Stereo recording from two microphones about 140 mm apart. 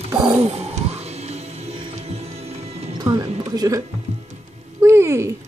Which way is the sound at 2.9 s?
30° right (ahead or behind).